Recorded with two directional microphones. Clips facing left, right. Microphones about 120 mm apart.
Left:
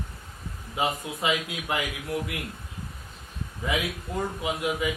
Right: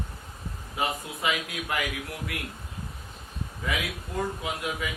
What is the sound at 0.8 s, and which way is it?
A man's voice, 20° left (ahead or behind).